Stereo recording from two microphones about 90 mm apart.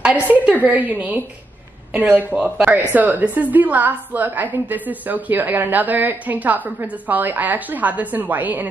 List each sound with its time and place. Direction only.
0.0 s a woman's voice: 15° right (ahead or behind)